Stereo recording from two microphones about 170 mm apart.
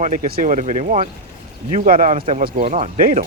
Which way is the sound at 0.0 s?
50° right (ahead or behind).